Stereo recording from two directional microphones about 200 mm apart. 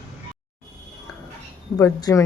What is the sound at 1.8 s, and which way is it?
Speech, 15° left (ahead or behind).